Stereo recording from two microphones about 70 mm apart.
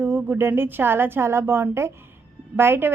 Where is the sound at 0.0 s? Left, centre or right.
Right.